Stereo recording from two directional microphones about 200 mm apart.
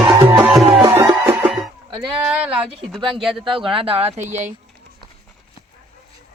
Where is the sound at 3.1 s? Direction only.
Centre (ahead or behind).